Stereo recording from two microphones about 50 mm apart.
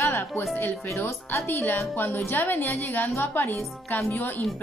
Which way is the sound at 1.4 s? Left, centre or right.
Left.